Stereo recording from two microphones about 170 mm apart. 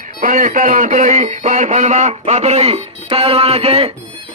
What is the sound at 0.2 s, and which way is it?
Speech, 50° right (ahead or behind).